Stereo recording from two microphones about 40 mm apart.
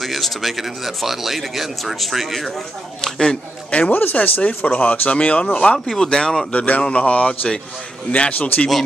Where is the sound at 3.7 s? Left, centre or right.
Left.